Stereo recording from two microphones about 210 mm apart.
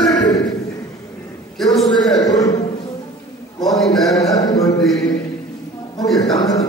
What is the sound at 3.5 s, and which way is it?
Speech, centre (ahead or behind).